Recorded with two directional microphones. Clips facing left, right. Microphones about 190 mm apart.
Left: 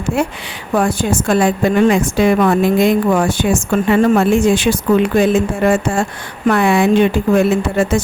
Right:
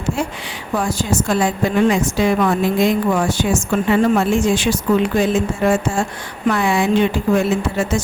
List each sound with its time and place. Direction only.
0.8 s speech: 60° left (ahead or behind)